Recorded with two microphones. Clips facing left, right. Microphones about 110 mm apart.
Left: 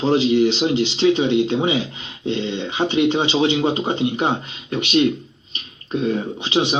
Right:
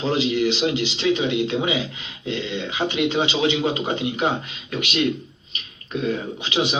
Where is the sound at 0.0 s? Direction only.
30° left (ahead or behind).